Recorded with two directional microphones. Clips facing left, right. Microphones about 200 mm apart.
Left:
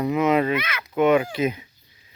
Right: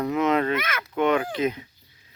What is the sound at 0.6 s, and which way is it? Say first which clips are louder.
Speech: even; 50° right (ahead or behind).